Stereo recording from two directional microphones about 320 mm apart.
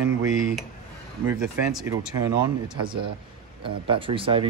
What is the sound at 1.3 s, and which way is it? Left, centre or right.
Speech, centre.